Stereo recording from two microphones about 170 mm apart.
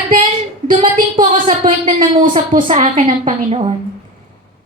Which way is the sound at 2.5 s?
45° right (ahead or behind).